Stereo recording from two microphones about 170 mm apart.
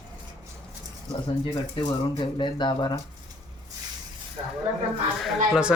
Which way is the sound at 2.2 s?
25° left (ahead or behind).